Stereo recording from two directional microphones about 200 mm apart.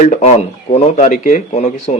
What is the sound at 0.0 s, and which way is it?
Speech, 35° left (ahead or behind).